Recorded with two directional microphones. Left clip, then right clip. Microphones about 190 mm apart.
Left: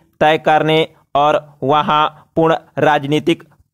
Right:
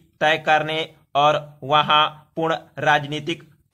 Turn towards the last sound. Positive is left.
turn(degrees=50)  # may be behind; listen again after turning